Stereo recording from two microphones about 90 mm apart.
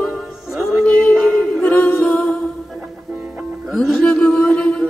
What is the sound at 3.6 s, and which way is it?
Music, 5° right (ahead or behind).